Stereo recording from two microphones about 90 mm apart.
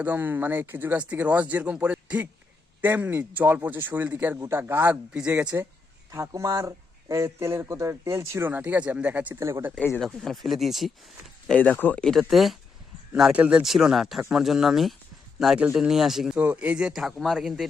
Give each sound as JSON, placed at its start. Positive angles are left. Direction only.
{"t": 0.0, "sound": "speech", "side_deg": -20}
{"t": 4.4, "sound": "speech", "side_deg": -30}
{"t": 6.1, "sound": "speech", "side_deg": -35}
{"t": 9.3, "sound": "speech", "side_deg": -30}
{"t": 10.0, "sound": "speech", "side_deg": 5}
{"t": 11.4, "sound": "speech", "side_deg": 15}
{"t": 12.0, "sound": "speech", "side_deg": 0}
{"t": 13.3, "sound": "speech", "side_deg": -10}
{"t": 16.4, "sound": "speech", "side_deg": -15}